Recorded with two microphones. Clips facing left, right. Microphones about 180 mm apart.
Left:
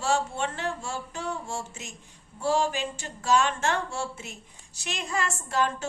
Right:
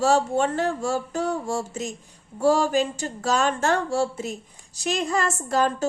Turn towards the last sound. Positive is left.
turn(degrees=-40)  # may be behind; listen again after turning